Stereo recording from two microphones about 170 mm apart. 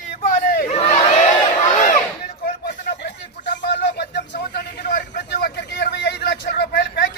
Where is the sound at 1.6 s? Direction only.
45° left (ahead or behind).